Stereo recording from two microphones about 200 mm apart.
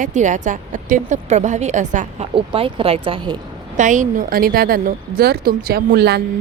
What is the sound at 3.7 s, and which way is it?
A woman's voice, 40° right (ahead or behind).